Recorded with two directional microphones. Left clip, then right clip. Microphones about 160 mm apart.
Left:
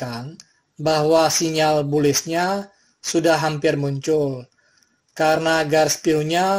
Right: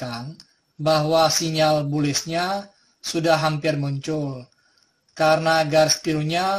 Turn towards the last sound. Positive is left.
turn(degrees=30)  # may be behind; listen again after turning